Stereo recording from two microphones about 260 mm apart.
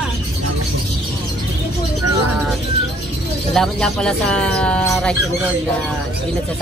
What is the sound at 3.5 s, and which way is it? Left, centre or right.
Speech, centre.